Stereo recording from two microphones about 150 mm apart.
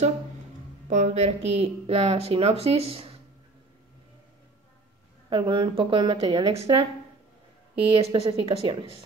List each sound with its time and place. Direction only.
0.8 s speech: 50° right (ahead or behind)
5.3 s speech: 35° right (ahead or behind)